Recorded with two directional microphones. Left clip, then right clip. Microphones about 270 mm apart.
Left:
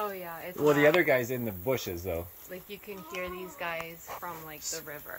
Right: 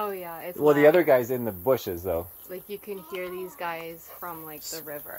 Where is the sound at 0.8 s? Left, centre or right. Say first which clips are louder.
Right 7 dB; centre.